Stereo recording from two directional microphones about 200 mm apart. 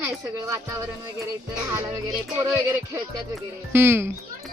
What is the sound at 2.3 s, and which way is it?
Speech, 15° right (ahead or behind).